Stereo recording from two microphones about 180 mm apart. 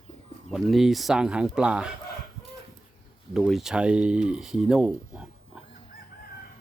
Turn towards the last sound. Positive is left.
turn(degrees=-5)  # may be behind; listen again after turning